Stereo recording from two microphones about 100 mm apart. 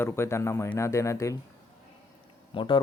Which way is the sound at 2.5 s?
55° left (ahead or behind).